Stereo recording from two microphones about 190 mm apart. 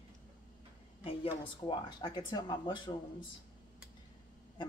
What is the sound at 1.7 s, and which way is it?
Speech, 25° left (ahead or behind).